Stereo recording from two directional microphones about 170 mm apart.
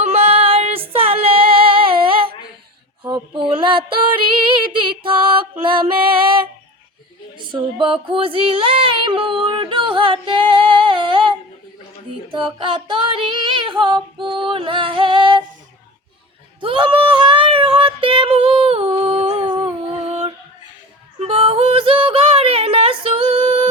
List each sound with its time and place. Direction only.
0.0 s female singing: 40° right (ahead or behind)
3.0 s a sound: 30° right (ahead or behind)
4.7 s music: 30° right (ahead or behind)
7.3 s female singing: 30° right (ahead or behind)
12.5 s female singing: 30° right (ahead or behind)
16.6 s female singing: 30° right (ahead or behind)